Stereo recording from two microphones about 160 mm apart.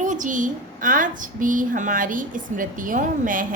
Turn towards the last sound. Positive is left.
turn(degrees=-55)  # may be behind; listen again after turning